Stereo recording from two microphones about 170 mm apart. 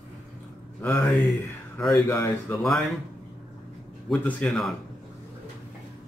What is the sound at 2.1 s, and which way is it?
Speech, 15° left (ahead or behind).